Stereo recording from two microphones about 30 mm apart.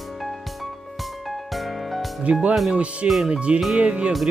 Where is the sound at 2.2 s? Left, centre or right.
Right.